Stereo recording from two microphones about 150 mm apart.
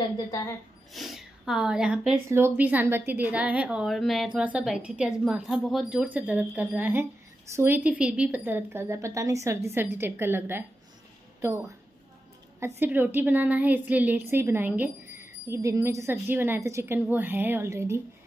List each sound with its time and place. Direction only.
0.9 s speech: centre (ahead or behind)
2.2 s a woman's voice: 15° right (ahead or behind)